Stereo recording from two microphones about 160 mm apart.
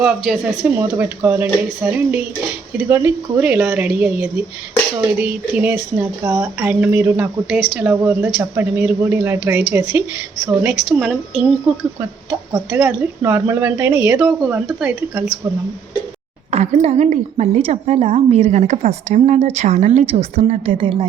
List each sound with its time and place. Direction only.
0.0 s a woman's voice: centre (ahead or behind)
0.6 s speech: 15° right (ahead or behind)
10.8 s a woman's voice: centre (ahead or behind)
16.5 s a woman's voice: 40° right (ahead or behind)
20.5 s a woman's voice: 35° right (ahead or behind)